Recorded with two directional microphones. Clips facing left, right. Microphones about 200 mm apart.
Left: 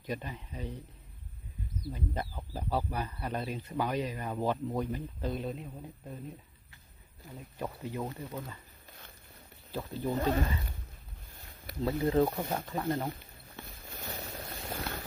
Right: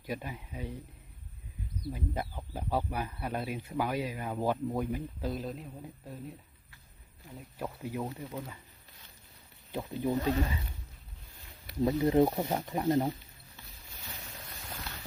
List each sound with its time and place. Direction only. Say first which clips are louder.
0.0 s speech: even; 10° right (ahead or behind)
1.8 s speech: right 1 dB; 10° right (ahead or behind)
7.6 s speech: even; 5° right (ahead or behind)
9.7 s speech: right 2 dB; 15° right (ahead or behind)
10.2 s speech: left 2 dB; 50° left (ahead or behind)
11.9 s speech: right 2 dB; 20° right (ahead or behind)
13.6 s a sound: left 8 dB; 50° left (ahead or behind)